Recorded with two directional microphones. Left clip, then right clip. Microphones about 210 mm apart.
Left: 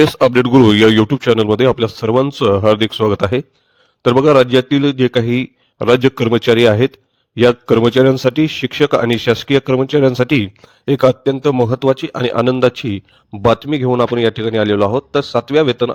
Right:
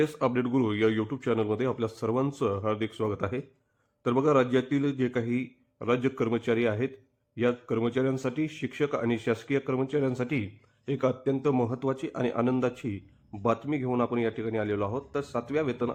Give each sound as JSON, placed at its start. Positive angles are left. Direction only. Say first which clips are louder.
{"t": 0.0, "sound": "a man's voice", "louder": "left 16 dB", "side_deg": 50}